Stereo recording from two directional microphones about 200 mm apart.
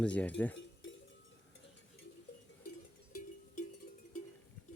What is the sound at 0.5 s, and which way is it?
Cowbell, 70° left (ahead or behind).